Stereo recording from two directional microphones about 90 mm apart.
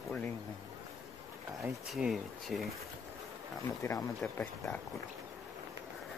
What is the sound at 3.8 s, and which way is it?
Speech, 35° left (ahead or behind).